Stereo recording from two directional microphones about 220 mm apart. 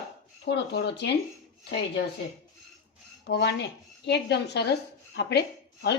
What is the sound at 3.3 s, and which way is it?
Speech, 50° left (ahead or behind).